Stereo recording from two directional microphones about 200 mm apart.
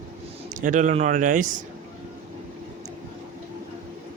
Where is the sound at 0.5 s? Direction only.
40° right (ahead or behind).